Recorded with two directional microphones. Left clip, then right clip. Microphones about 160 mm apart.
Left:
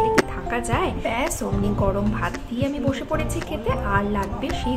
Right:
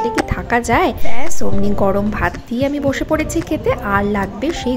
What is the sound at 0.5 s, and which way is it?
A woman's voice, 45° right (ahead or behind).